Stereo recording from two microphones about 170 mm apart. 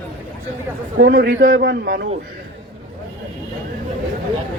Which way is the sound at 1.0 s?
60° right (ahead or behind).